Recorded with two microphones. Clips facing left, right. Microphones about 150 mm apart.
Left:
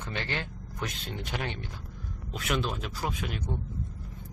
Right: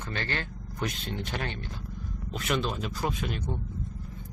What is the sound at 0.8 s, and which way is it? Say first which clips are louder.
Speech: right 4 dB; centre (ahead or behind).